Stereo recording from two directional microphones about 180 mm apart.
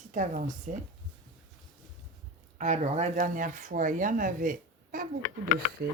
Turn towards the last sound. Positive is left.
turn(degrees=-60)  # may be behind; listen again after turning